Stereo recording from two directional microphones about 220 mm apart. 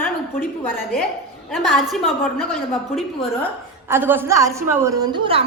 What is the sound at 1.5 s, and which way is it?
A woman's voice, centre (ahead or behind).